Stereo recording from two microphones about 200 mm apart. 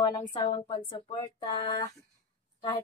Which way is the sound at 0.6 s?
25° left (ahead or behind).